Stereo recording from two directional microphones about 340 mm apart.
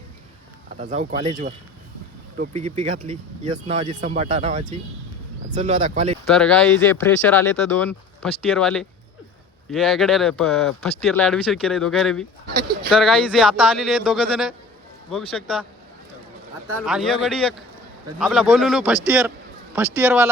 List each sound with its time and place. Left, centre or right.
0.8 s speech: centre
6.2 s speech: centre
12.5 s speech: right
12.9 s speech: centre
16.8 s speech: centre